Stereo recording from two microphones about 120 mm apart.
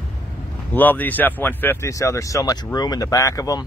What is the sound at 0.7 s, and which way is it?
Speech, 15° left (ahead or behind).